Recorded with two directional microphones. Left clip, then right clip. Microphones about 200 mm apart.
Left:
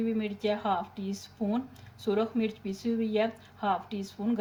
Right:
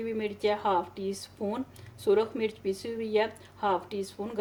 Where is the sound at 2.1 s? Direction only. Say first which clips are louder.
Right 3 dB; 55° right (ahead or behind).